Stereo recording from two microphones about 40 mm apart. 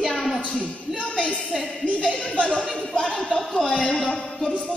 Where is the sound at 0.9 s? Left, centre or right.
Left.